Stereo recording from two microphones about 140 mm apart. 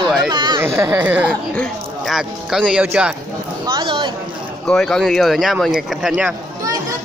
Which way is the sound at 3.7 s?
35° right (ahead or behind).